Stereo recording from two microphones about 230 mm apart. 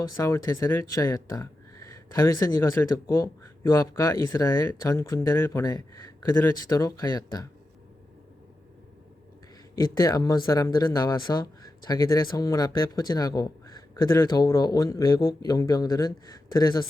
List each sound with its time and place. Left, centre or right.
0.2 s speech: centre
9.7 s speech: centre